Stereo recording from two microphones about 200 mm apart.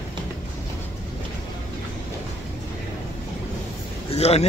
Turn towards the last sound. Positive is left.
turn(degrees=30)  # may be behind; listen again after turning